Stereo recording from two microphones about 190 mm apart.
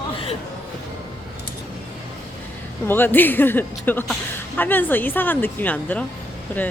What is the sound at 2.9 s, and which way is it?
A woman's voice, 10° left (ahead or behind).